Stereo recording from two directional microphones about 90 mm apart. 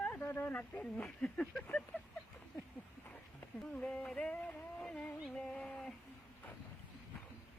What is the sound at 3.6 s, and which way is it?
Speech, 10° left (ahead or behind).